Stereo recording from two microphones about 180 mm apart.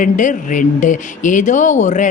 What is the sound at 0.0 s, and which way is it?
A woman's voice, 45° left (ahead or behind).